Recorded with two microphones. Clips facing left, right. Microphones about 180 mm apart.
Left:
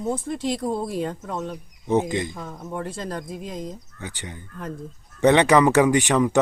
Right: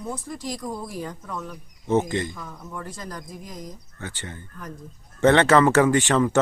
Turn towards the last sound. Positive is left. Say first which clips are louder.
# left 1 dB
turn(degrees=15)  # may be behind; listen again after turning